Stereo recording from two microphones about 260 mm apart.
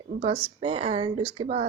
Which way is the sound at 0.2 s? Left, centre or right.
Right.